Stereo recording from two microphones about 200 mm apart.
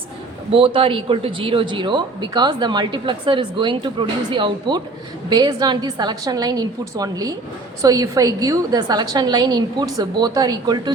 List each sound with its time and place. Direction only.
0.5 s speech: 25° right (ahead or behind)